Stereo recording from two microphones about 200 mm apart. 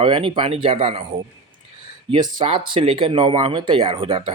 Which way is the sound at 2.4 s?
25° right (ahead or behind).